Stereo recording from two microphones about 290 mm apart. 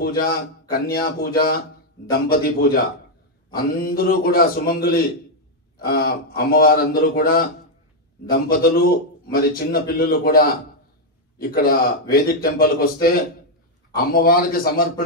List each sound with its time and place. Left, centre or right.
0.0 s a man's voice: left